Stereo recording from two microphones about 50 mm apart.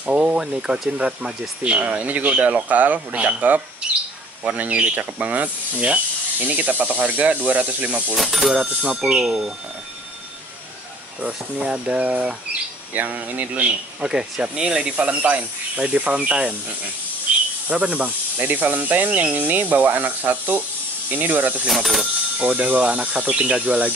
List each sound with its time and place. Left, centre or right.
0.0 s a sound: right
0.6 s speech: centre
8.2 s speech: centre
8.5 s speech: centre
11.1 s speech: right
17.6 s speech: right
21.6 s speech: centre
22.4 s speech: centre
22.7 s speech: right